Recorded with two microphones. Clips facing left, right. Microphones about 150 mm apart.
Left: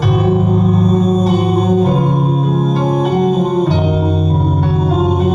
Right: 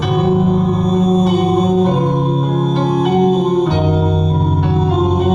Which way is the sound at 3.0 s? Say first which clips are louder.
Right 2 dB; 50° left (ahead or behind).